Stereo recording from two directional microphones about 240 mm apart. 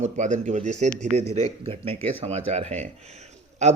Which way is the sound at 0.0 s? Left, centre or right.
Right.